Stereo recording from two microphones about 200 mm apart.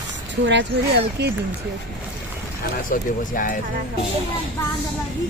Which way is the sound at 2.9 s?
45° left (ahead or behind).